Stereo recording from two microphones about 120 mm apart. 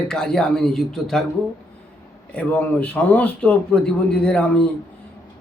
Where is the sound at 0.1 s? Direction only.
5° left (ahead or behind).